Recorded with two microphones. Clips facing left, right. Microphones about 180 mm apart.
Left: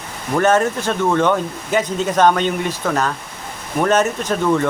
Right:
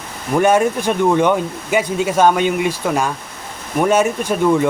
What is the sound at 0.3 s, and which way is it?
Speech, 10° right (ahead or behind).